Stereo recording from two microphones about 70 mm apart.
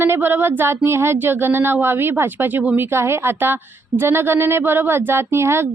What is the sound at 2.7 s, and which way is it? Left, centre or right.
A woman's voice, right.